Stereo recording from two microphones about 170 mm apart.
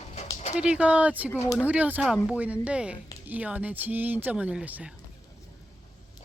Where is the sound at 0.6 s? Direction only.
5° right (ahead or behind).